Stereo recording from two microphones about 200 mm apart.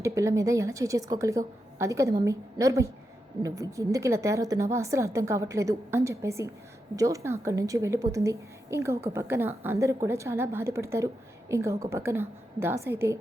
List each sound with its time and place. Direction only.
0.0 s a woman's voice: 15° right (ahead or behind)